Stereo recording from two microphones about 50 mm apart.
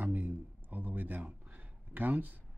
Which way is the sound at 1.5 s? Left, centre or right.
Right.